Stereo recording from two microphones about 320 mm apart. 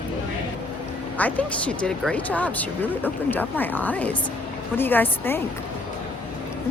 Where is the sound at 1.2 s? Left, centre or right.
Centre.